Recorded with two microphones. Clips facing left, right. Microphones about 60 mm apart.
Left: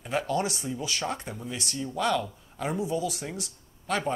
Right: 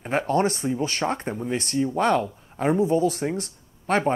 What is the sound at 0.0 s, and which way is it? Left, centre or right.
Speech, right.